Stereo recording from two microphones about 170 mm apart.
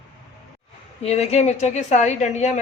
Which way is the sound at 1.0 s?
40° left (ahead or behind).